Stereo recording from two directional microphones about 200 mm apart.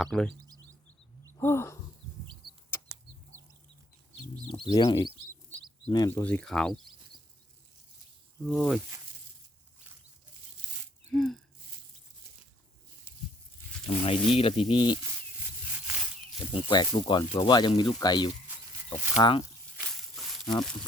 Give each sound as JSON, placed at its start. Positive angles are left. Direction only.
{"t": 0.0, "sound": "speech", "side_deg": 5}
{"t": 1.4, "sound": "a sound", "side_deg": 10}
{"t": 2.4, "sound": "bird flight", "side_deg": 0}
{"t": 4.4, "sound": "speech", "side_deg": 25}
{"t": 6.2, "sound": "speech", "side_deg": 5}
{"t": 8.4, "sound": "speech", "side_deg": 0}
{"t": 11.1, "sound": "speech", "side_deg": 0}
{"t": 13.8, "sound": "speech", "side_deg": 30}
{"t": 16.5, "sound": "speech", "side_deg": 25}